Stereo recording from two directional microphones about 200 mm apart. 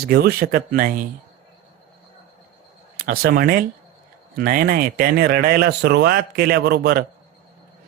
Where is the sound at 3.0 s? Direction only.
45° right (ahead or behind).